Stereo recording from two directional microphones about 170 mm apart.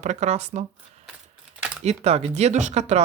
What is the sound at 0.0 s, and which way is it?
Speech, 45° right (ahead or behind).